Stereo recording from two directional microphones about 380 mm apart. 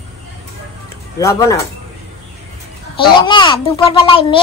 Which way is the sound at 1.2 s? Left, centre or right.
Centre.